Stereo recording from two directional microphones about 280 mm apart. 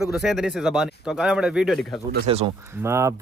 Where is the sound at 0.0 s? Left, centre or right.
Centre.